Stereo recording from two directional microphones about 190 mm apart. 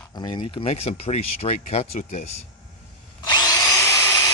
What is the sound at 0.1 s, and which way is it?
Speech, 25° left (ahead or behind).